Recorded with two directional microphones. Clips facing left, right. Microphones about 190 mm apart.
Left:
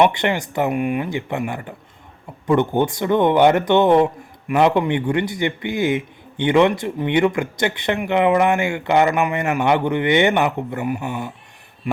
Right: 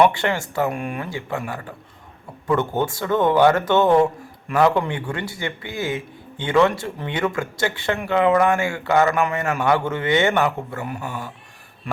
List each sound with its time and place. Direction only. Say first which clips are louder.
0.0 s speech: left 1 dB; 20° left (ahead or behind)